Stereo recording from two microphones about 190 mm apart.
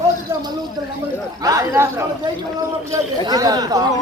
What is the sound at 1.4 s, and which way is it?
Speech, 20° right (ahead or behind).